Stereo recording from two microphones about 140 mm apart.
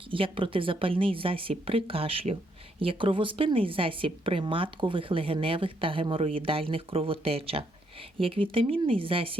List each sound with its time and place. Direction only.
0.1 s a woman's voice: 40° right (ahead or behind)